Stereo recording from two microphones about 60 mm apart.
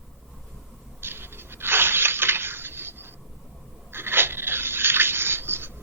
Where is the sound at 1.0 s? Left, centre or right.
Right.